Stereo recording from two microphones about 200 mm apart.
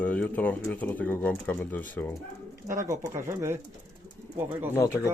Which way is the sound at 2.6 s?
15° right (ahead or behind).